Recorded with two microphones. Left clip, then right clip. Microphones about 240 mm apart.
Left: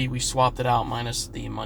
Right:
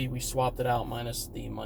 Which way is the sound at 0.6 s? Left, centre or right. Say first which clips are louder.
Left 6 dB; left.